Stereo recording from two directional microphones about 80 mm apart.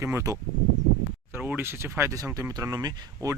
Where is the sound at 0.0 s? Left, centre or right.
Right.